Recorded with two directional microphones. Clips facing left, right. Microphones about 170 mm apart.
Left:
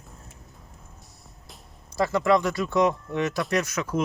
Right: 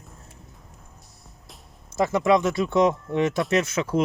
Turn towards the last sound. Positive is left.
turn(degrees=-25)  # may be behind; listen again after turning